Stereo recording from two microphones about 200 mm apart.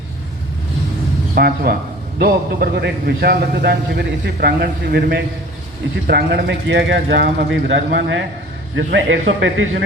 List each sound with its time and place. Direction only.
1.4 s a man's voice: 50° right (ahead or behind); by 9.8 s 70° right (ahead or behind)